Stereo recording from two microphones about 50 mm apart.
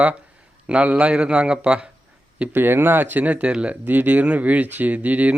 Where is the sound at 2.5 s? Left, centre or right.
Right.